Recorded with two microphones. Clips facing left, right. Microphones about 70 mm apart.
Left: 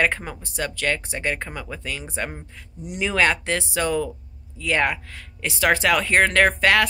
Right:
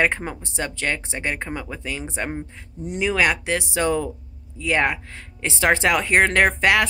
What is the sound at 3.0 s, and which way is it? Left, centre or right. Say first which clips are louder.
Speech: even; centre.